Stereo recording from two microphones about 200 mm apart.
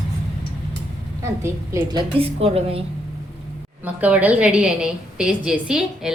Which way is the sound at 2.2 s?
30° right (ahead or behind).